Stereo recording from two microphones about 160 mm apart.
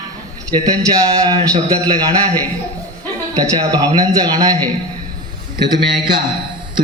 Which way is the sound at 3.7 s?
25° right (ahead or behind).